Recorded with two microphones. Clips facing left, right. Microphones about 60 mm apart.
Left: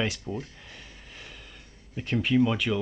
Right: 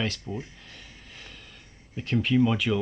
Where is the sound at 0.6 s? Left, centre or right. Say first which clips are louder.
Left 1 dB; centre.